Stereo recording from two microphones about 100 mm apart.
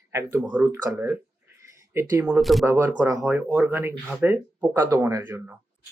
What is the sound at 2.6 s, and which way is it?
Speech, 25° right (ahead or behind).